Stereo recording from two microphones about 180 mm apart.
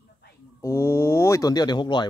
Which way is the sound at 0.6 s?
15° left (ahead or behind).